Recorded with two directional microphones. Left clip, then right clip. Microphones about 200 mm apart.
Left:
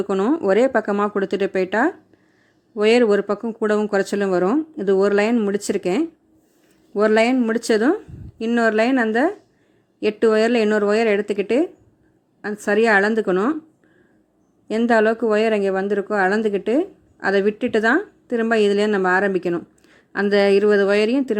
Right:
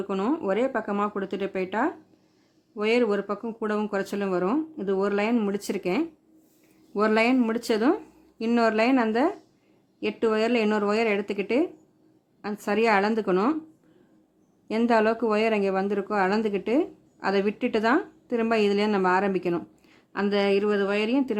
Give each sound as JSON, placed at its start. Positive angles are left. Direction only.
{"t": 0.0, "sound": "speech", "side_deg": 15}
{"t": 14.7, "sound": "speech", "side_deg": 10}